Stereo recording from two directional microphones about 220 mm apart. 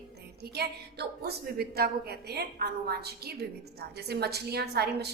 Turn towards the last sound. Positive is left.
turn(degrees=-50)  # may be behind; listen again after turning